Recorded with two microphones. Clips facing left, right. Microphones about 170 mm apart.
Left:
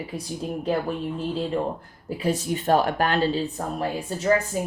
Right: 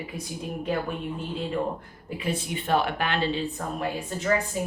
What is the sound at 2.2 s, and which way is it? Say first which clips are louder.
Speech: left 5 dB; 40° left (ahead or behind).